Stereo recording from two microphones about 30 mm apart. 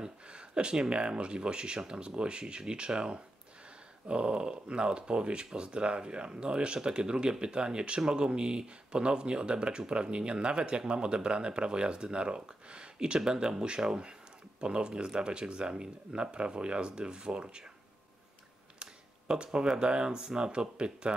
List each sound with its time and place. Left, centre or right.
0.0 s speech: right
18.8 s a sound: right
19.8 s speech: right
20.5 s speech: right